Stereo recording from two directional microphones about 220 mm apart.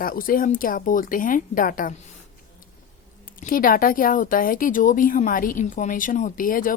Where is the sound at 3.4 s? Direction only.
40° left (ahead or behind).